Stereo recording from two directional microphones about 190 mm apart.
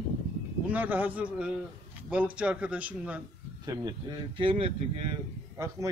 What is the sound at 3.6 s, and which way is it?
Speech, 20° right (ahead or behind).